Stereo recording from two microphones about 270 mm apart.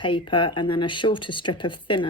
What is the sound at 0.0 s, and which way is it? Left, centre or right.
Speech, centre.